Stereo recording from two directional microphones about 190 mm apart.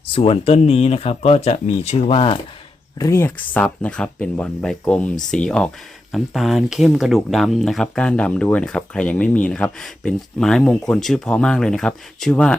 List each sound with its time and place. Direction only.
0.1 s speech: 30° left (ahead or behind)
3.0 s speech: 15° left (ahead or behind)